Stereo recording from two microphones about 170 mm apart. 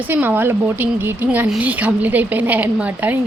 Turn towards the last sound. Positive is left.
turn(degrees=-10)  # may be behind; listen again after turning